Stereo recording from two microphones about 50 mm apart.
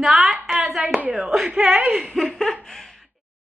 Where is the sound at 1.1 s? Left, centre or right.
Centre.